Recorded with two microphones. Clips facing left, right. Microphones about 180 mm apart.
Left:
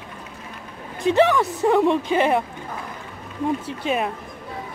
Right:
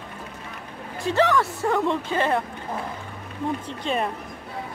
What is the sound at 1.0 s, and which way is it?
Speech, 20° left (ahead or behind).